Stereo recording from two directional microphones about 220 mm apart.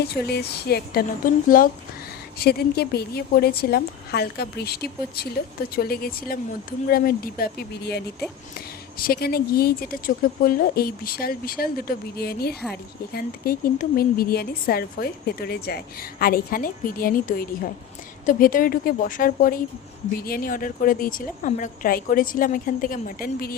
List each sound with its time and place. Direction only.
0.0 s a woman's voice: 45° left (ahead or behind)